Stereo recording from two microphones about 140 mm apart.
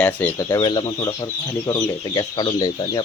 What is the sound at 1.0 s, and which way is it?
Speech, 15° left (ahead or behind).